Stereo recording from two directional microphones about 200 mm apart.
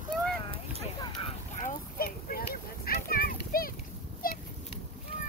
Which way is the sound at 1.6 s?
45° left (ahead or behind).